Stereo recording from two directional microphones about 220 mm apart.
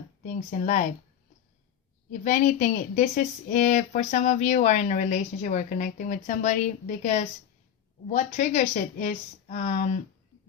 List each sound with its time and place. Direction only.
0.2 s speech: 35° left (ahead or behind)
2.0 s speech: 35° left (ahead or behind)